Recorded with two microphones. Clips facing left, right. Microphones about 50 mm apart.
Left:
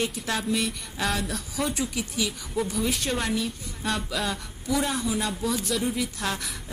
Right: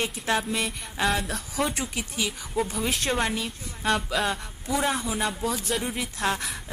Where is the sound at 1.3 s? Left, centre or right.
Right.